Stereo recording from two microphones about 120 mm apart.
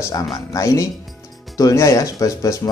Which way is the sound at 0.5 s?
25° left (ahead or behind).